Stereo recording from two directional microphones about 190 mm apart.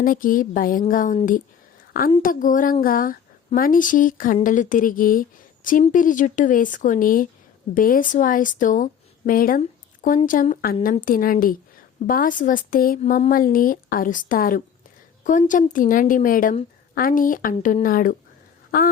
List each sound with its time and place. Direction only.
0.0 s a woman's voice: 45° left (ahead or behind)